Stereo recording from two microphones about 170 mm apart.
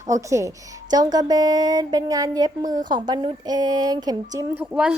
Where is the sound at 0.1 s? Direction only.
20° right (ahead or behind).